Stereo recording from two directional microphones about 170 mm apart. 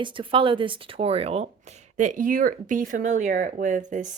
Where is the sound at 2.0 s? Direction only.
50° right (ahead or behind).